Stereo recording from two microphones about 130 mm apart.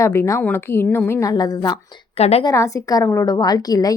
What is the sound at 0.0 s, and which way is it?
A woman's voice, 20° left (ahead or behind).